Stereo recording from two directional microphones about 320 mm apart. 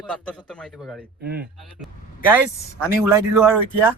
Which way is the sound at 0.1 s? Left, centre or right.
Centre.